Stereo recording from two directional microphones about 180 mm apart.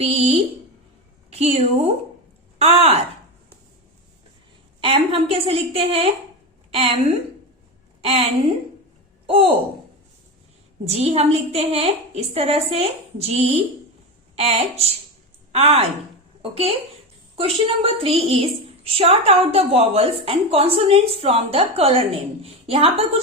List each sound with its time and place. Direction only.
0.0 s a sound: 35° right (ahead or behind)
1.3 s a woman's voice: 35° right (ahead or behind)
4.8 s a woman's voice: 30° right (ahead or behind)
8.0 s a woman's voice: 35° right (ahead or behind)
10.8 s a woman's voice: 35° right (ahead or behind)